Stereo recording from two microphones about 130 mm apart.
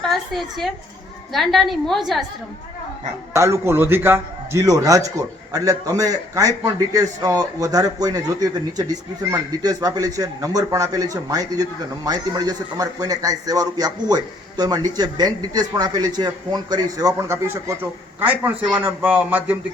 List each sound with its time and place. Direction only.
0.1 s a woman's voice: centre (ahead or behind)
3.3 s a man's voice: 20° right (ahead or behind)